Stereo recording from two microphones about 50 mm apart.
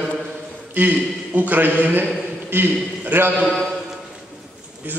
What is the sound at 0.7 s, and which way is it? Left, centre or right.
A man's voice, right.